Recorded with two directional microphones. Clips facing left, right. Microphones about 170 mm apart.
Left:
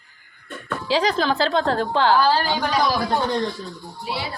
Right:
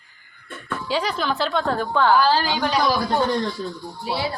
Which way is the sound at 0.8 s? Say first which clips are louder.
Left 4 dB; 90° left.